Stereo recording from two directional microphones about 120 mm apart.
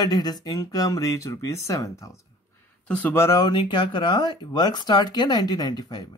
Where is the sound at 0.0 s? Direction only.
35° left (ahead or behind).